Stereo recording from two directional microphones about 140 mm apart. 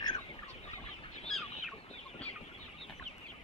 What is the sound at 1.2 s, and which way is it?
Chicken, centre (ahead or behind).